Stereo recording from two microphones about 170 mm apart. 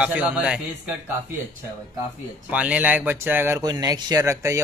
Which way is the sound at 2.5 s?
10° right (ahead or behind).